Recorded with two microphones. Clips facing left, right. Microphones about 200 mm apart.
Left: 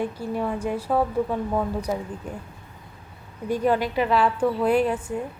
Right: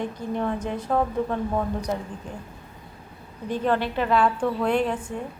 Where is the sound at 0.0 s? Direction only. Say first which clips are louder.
Left 1 dB; 10° left (ahead or behind).